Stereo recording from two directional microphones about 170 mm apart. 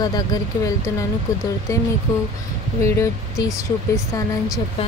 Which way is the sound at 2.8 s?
15° left (ahead or behind).